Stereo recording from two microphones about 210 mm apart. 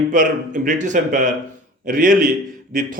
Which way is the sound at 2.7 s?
40° right (ahead or behind).